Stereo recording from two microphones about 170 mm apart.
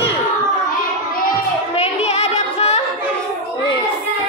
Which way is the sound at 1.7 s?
40° left (ahead or behind).